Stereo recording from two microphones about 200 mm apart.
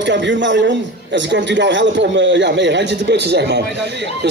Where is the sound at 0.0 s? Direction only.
60° right (ahead or behind).